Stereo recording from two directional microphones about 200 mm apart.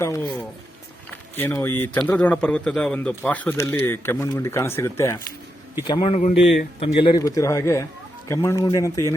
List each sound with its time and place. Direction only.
0.0 s a man's voice: 15° left (ahead or behind)
1.4 s a man's voice: 10° left (ahead or behind)
6.1 s a man's voice: 35° left (ahead or behind); by 9.1 s 15° left (ahead or behind)